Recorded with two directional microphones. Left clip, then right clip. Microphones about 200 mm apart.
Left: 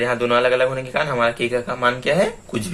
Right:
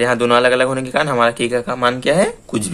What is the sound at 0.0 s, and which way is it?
A man's voice, 40° right (ahead or behind).